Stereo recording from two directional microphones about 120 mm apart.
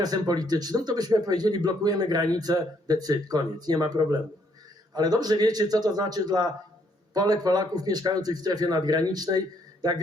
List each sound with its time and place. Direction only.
0.0 s speech: 35° right (ahead or behind)